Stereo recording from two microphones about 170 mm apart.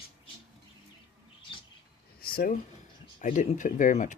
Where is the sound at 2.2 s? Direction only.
60° left (ahead or behind).